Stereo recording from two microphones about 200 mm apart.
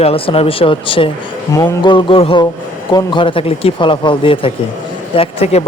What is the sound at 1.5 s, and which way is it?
A man's voice, 15° left (ahead or behind).